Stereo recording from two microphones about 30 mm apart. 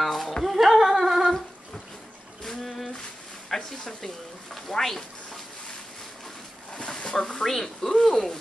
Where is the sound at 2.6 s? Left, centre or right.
Centre.